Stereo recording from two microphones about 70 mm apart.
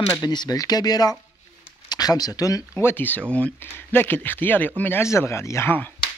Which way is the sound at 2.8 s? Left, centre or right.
Left.